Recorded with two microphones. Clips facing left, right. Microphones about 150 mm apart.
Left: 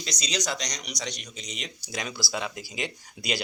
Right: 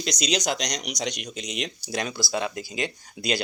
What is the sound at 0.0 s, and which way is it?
Speech, 90° right.